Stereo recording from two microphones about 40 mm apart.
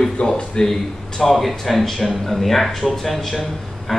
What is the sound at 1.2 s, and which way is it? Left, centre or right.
Speech, centre.